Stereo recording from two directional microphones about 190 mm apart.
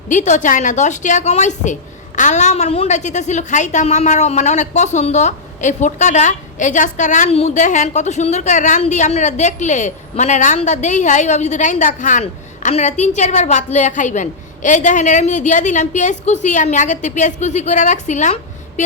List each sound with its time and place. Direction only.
0.1 s a woman's voice: 40° left (ahead or behind)